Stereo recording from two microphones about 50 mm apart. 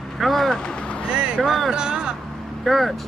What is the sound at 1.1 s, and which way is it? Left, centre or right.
Vehicle, right.